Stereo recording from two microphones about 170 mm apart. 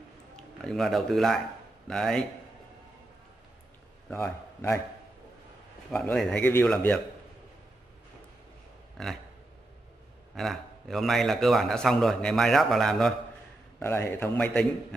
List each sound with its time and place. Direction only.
0.7 s a man's voice: centre (ahead or behind)
4.1 s a man's voice: 10° left (ahead or behind)
5.9 s a man's voice: 5° left (ahead or behind)
8.9 s speech: centre (ahead or behind)
10.3 s a man's voice: centre (ahead or behind)
13.7 s a man's voice: 15° left (ahead or behind)